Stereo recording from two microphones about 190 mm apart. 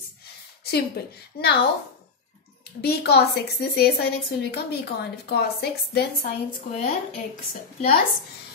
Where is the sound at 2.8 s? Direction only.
60° left (ahead or behind).